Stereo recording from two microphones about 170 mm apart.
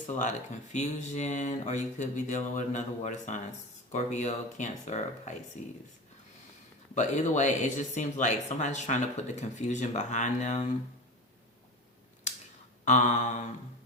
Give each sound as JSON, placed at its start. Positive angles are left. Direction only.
{"t": 0.2, "sound": "speech", "side_deg": 45}
{"t": 6.9, "sound": "speech", "side_deg": 45}
{"t": 12.8, "sound": "a sound", "side_deg": 45}